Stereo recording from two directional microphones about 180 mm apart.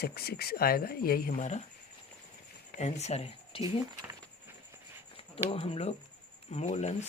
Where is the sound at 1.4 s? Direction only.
40° left (ahead or behind).